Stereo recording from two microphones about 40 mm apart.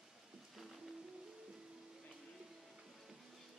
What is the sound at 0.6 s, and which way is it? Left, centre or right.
Music, centre.